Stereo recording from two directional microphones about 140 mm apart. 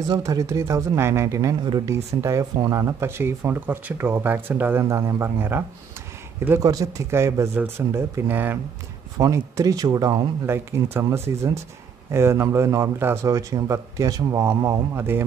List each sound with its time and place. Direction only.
0.1 s a man's voice: 25° right (ahead or behind)
6.6 s a man's voice: 25° right (ahead or behind)